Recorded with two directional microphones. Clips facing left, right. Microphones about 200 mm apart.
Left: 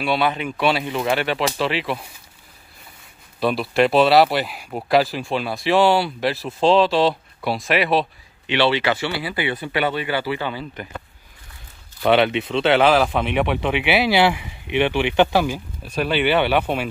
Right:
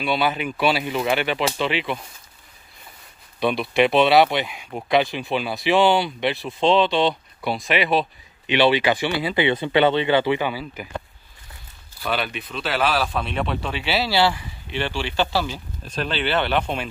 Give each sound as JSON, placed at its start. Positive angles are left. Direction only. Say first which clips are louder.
{"t": 0.0, "sound": "speech", "louder": "left 1 dB", "side_deg": 0}
{"t": 3.3, "sound": "speech", "louder": "left 1 dB", "side_deg": 0}
{"t": 8.5, "sound": "speech", "louder": "right 1 dB", "side_deg": -15}
{"t": 10.5, "sound": "speech", "louder": "left 1 dB", "side_deg": -10}
{"t": 12.0, "sound": "speech", "louder": "left 10 dB", "side_deg": 75}
{"t": 12.4, "sound": "speech", "louder": "left 5 dB", "side_deg": 25}